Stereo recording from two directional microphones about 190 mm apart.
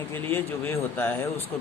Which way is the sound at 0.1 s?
10° left (ahead or behind).